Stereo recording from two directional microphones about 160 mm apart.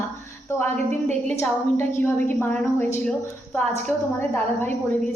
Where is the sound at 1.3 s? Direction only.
15° left (ahead or behind).